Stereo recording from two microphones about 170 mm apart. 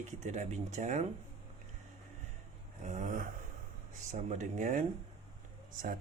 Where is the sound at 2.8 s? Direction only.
50° right (ahead or behind).